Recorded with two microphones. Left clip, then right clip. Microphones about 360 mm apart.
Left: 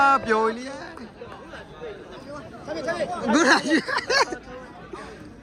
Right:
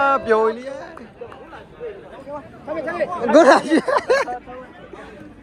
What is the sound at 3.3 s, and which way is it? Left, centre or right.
Speech, centre.